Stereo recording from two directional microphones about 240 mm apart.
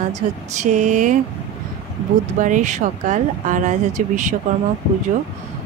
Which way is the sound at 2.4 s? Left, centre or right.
Right.